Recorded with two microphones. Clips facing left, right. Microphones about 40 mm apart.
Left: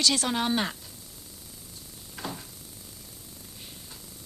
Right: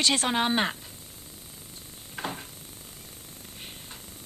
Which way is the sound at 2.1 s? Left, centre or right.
Right.